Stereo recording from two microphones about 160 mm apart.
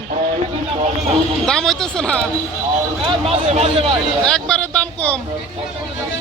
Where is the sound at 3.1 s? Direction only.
40° right (ahead or behind).